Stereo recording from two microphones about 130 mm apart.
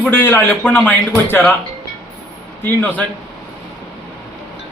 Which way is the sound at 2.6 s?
15° left (ahead or behind).